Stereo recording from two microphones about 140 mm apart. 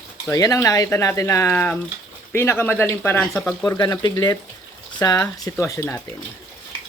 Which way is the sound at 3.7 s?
25° left (ahead or behind).